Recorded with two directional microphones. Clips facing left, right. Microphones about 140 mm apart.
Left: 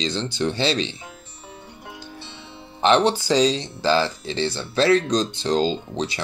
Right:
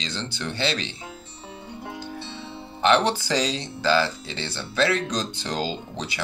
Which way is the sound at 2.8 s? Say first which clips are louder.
Left 3 dB; 25° left (ahead or behind).